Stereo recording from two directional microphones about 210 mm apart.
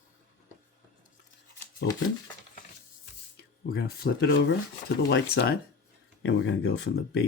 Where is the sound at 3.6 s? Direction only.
45° left (ahead or behind).